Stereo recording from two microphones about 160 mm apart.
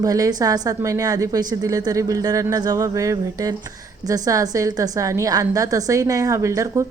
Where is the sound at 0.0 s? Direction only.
20° right (ahead or behind).